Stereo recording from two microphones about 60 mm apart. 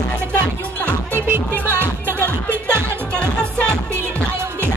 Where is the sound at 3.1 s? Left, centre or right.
Centre.